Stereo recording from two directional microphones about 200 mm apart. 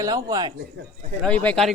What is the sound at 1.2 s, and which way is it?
Speech, 5° left (ahead or behind).